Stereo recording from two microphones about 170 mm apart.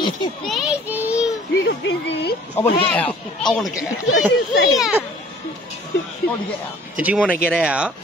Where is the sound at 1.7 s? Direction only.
90° left.